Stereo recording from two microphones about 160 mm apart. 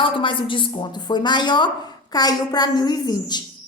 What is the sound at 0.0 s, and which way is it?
Speech, 30° left (ahead or behind).